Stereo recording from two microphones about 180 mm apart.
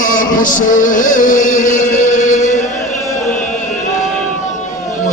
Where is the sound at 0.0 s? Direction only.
45° left (ahead or behind).